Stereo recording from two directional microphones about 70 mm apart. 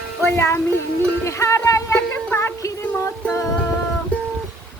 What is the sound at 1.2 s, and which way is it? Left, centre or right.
Speech, left.